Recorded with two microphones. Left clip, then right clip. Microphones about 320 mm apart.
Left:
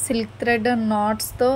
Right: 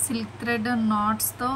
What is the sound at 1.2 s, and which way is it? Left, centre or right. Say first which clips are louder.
Speech: left 8 dB; centre.